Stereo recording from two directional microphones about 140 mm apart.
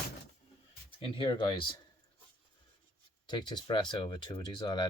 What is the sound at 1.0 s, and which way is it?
Speech, 40° left (ahead or behind).